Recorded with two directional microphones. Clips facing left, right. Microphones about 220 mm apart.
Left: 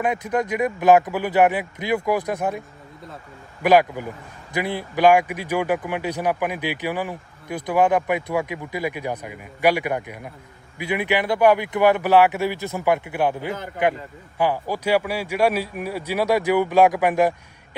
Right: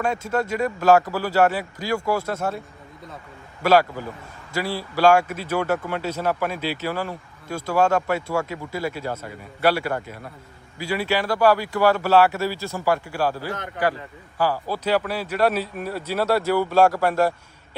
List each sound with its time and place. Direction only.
0.0 s speech: 15° left (ahead or behind)
3.6 s speech: 15° left (ahead or behind)